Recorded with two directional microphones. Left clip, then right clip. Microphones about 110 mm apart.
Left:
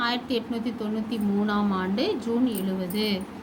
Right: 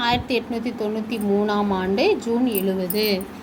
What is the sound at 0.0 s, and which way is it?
Speech, 45° right (ahead or behind).